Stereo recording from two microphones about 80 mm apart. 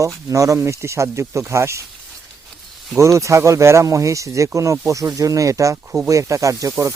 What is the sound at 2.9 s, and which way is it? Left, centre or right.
Speech, right.